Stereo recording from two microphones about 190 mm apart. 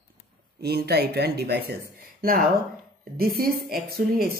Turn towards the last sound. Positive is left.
turn(degrees=-50)  # may be behind; listen again after turning